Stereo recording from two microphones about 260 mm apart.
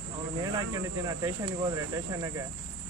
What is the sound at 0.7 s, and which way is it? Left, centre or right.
Speech, centre.